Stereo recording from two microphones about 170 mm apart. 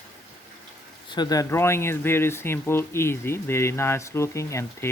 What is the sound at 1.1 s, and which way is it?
Speech, 20° left (ahead or behind).